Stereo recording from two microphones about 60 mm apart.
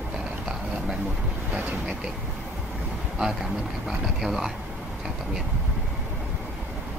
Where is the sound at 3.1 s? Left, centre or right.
Centre.